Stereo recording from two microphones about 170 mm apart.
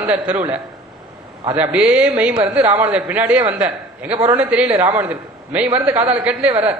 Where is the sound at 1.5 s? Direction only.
10° right (ahead or behind).